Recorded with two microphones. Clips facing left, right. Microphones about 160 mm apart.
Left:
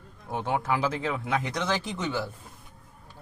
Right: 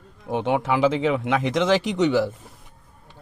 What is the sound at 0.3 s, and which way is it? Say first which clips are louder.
Speech: right 6 dB; 75° right (ahead or behind).